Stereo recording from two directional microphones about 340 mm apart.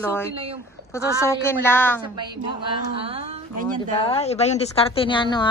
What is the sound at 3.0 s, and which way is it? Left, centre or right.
Speech, centre.